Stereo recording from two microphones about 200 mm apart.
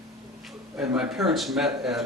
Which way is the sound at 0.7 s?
5° right (ahead or behind).